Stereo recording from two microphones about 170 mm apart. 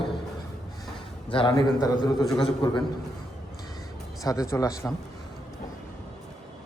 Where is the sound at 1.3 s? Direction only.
30° left (ahead or behind).